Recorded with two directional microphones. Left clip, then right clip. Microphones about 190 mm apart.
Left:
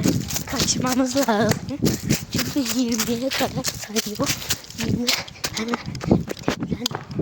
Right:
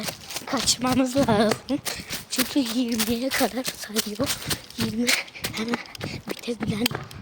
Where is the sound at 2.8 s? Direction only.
15° left (ahead or behind).